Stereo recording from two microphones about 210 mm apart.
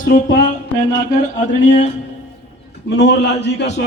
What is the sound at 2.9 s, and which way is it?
Speech, 55° left (ahead or behind).